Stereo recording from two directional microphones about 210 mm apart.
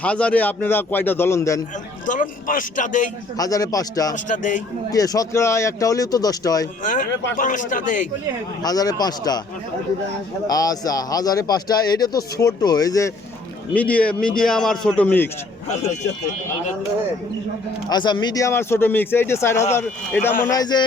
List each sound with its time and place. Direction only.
0.0 s a man's voice: 5° left (ahead or behind)
2.0 s a man's voice: 40° left (ahead or behind)
3.3 s a man's voice: 15° left (ahead or behind)
4.1 s speech: 35° left (ahead or behind)
4.9 s a man's voice: 15° left (ahead or behind)
6.8 s speech: 40° left (ahead or behind)
8.6 s a man's voice: 20° left (ahead or behind)
10.4 s a man's voice: 15° left (ahead or behind)
17.8 s a man's voice: 20° left (ahead or behind)
20.5 s music: 20° left (ahead or behind)